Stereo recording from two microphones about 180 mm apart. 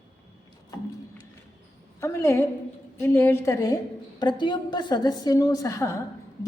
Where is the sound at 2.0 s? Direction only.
15° left (ahead or behind).